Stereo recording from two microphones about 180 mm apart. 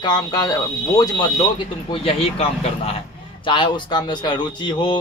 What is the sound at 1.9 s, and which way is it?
A man's voice, 30° left (ahead or behind).